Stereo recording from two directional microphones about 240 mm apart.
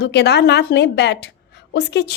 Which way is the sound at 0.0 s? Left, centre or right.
Left.